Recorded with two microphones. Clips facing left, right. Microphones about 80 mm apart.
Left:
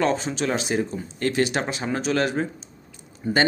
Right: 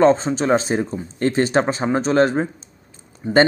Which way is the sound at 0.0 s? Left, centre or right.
Right.